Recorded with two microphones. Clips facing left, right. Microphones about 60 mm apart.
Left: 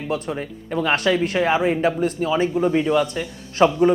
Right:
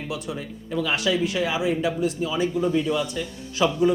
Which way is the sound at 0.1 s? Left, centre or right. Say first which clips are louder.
Left 8 dB; left.